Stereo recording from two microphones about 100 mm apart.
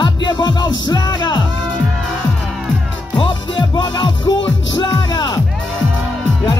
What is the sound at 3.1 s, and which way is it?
Music, 55° left (ahead or behind).